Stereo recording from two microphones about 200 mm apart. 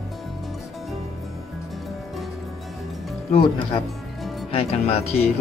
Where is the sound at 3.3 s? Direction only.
25° left (ahead or behind).